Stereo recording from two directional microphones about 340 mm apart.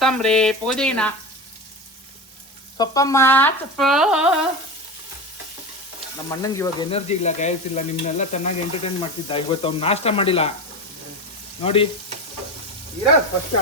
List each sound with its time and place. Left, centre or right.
0.0 s speech: centre
2.7 s speech: centre
6.2 s sizzle: centre
9.3 s speech: centre
11.6 s speech: centre